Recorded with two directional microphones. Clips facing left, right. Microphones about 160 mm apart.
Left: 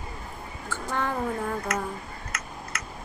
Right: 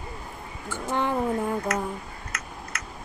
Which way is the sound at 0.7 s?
20° right (ahead or behind).